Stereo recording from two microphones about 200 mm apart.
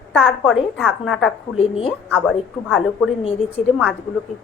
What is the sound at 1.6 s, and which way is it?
Speech, 30° left (ahead or behind).